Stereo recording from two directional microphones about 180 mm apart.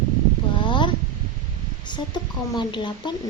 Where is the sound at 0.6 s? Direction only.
25° left (ahead or behind).